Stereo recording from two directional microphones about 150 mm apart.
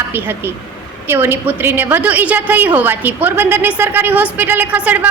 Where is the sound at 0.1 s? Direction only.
15° right (ahead or behind).